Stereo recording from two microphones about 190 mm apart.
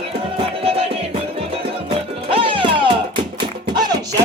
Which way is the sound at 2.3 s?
30° right (ahead or behind).